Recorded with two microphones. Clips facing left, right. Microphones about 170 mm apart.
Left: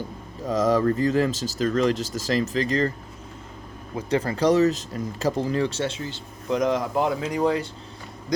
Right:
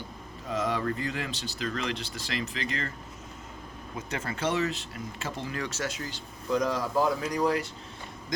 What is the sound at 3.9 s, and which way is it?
Speech, 30° left (ahead or behind).